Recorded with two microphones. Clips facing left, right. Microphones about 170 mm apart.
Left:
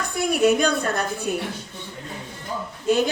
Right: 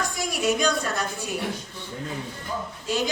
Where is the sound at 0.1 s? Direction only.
55° left (ahead or behind).